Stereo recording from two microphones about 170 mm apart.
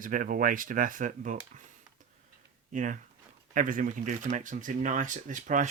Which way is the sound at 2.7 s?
50° right (ahead or behind).